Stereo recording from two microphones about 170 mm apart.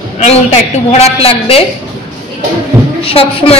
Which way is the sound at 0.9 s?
35° left (ahead or behind).